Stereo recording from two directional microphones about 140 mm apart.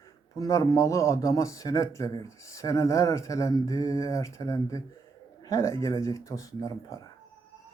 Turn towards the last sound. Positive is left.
turn(degrees=25)  # may be behind; listen again after turning